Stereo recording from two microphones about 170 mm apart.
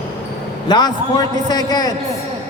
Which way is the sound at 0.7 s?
25° left (ahead or behind).